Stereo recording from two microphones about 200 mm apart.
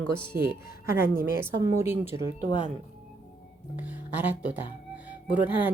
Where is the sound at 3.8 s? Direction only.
10° right (ahead or behind).